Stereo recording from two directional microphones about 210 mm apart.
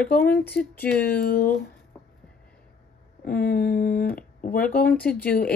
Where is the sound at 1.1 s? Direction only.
45° left (ahead or behind).